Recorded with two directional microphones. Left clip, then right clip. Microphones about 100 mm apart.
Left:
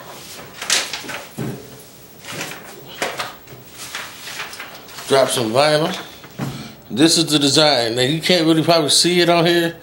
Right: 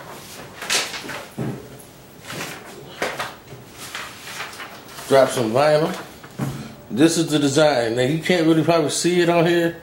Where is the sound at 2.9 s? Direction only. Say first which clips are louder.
Left 2 dB; 10° left (ahead or behind).